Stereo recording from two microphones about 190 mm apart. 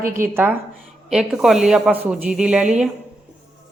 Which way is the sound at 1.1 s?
Centre (ahead or behind).